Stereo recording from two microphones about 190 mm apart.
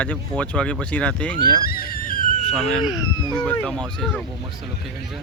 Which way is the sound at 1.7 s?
50° left (ahead or behind).